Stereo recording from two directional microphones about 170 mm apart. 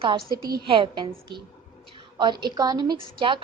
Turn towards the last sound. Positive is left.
turn(degrees=-30)  # may be behind; listen again after turning